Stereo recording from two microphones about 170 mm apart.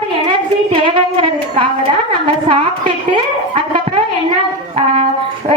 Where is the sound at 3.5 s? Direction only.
30° right (ahead or behind).